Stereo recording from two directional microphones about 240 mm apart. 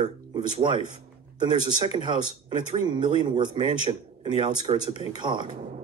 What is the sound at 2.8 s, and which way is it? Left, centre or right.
Speech, centre.